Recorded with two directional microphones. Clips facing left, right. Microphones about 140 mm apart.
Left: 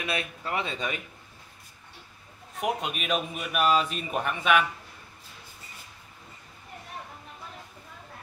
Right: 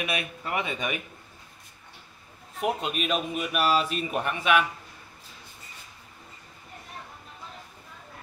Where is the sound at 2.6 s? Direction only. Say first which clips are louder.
Right 2 dB; centre (ahead or behind).